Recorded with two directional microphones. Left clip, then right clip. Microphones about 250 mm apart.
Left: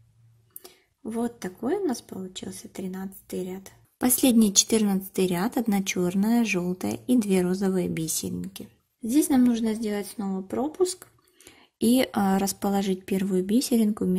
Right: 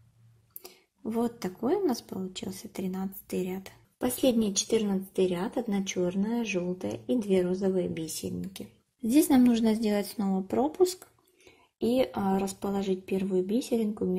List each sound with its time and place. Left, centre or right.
0.6 s speech: centre
4.0 s a woman's voice: left
9.1 s speech: centre
11.9 s a woman's voice: left